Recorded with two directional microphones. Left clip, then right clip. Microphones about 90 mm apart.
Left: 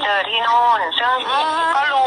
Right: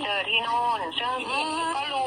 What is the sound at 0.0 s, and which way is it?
Radio, 45° left (ahead or behind).